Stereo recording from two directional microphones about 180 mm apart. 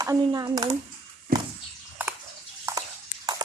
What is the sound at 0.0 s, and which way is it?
Speech, 20° right (ahead or behind).